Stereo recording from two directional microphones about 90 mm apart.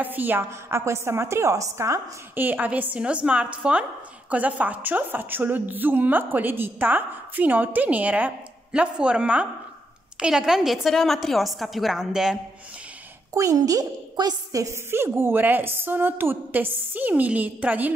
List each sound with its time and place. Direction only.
0.0 s a woman's voice: 20° right (ahead or behind); by 2.0 s 35° right (ahead or behind)
2.3 s a woman's voice: 20° right (ahead or behind)
13.3 s a woman's voice: 40° right (ahead or behind)
14.9 s a woman's voice: 25° right (ahead or behind)